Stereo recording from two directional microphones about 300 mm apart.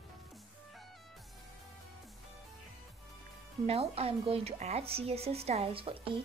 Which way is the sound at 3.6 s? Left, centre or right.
Centre.